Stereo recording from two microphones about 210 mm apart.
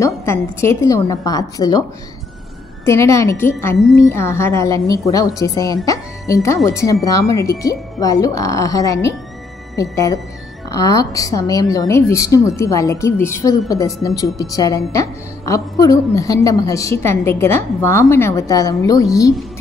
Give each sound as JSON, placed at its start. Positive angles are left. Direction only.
{"t": 0.0, "sound": "a woman's voice", "side_deg": 10}
{"t": 2.8, "sound": "a woman's voice", "side_deg": 15}